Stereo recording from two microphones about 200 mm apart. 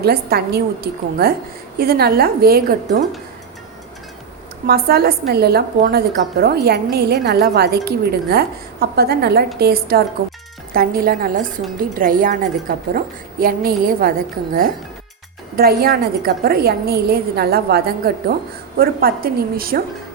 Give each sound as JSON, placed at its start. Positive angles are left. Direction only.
{"t": 0.0, "sound": "a woman's voice", "side_deg": -50}
{"t": 4.6, "sound": "a woman's voice", "side_deg": -50}
{"t": 15.5, "sound": "a woman's voice", "side_deg": -50}